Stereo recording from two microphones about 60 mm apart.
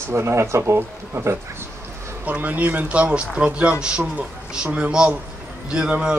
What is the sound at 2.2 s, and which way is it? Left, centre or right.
A man's voice, right.